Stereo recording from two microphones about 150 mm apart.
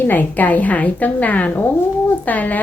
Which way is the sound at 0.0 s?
10° left (ahead or behind).